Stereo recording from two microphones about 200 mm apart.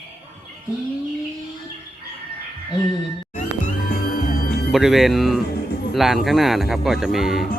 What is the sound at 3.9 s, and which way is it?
Music, 50° left (ahead or behind).